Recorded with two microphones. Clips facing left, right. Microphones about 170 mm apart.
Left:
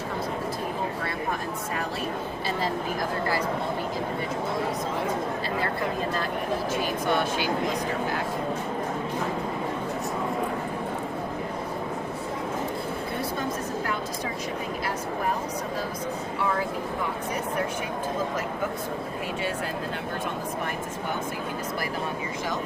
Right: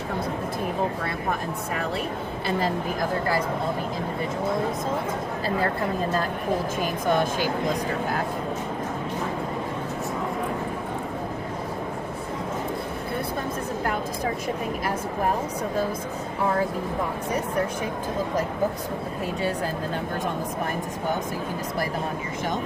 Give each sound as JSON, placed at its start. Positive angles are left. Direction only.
{"t": 7.1, "sound": "speech", "side_deg": -45}